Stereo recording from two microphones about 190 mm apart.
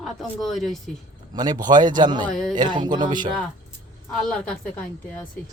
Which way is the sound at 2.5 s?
25° right (ahead or behind).